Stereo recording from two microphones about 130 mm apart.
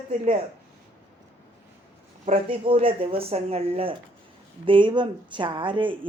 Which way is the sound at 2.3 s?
45° right (ahead or behind).